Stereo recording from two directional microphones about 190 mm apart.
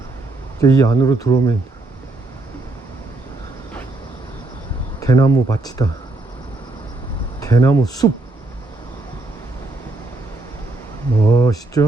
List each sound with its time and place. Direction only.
0.6 s speech: 15° left (ahead or behind)
4.9 s speech: 20° left (ahead or behind)
7.4 s speech: 15° left (ahead or behind)
11.3 s a sound: 15° left (ahead or behind)